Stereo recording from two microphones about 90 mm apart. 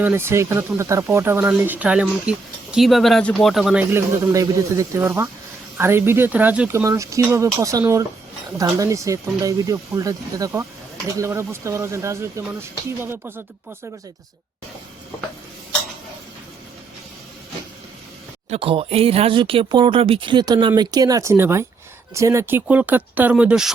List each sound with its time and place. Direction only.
0.0 s speech: 25° right (ahead or behind)
2.7 s speech: centre (ahead or behind)
3.9 s speech: 35° right (ahead or behind); by 6.7 s 20° right (ahead or behind)
6.7 s speech: 35° right (ahead or behind)
18.6 s speech: 90° right
20.4 s speech: 55° right (ahead or behind); by 22.6 s 25° right (ahead or behind)
22.6 s speech: 15° right (ahead or behind)